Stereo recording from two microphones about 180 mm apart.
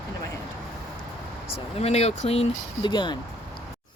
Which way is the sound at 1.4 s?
35° left (ahead or behind).